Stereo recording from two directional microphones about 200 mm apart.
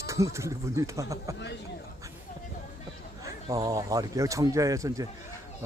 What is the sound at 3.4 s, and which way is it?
Speech, 20° right (ahead or behind).